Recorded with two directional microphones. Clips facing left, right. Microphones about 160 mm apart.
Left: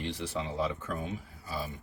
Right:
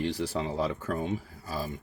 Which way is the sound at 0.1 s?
40° right (ahead or behind).